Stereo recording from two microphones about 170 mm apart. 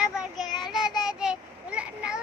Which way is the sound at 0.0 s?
Centre (ahead or behind).